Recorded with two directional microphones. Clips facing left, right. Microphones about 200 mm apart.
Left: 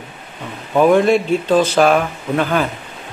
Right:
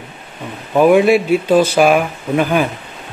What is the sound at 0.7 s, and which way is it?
A man's voice, 10° right (ahead or behind).